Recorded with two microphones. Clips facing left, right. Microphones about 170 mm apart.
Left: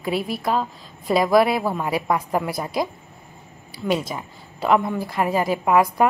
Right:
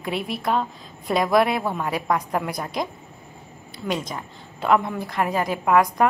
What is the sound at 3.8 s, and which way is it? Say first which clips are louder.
A woman's voice: left 4 dB; 5° left (ahead or behind).